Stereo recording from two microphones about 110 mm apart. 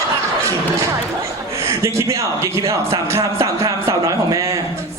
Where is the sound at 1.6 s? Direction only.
30° right (ahead or behind).